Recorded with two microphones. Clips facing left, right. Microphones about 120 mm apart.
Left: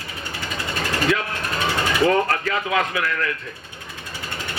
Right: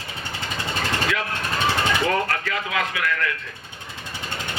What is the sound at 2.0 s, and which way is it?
Speech, 30° left (ahead or behind).